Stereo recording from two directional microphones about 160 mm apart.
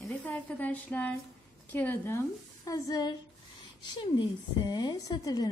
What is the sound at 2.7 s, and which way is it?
Speech, 20° left (ahead or behind).